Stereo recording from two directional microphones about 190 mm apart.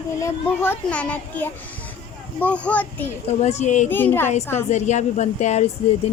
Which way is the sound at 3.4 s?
35° left (ahead or behind).